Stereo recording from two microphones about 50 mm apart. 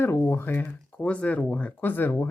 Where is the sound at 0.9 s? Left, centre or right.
Left.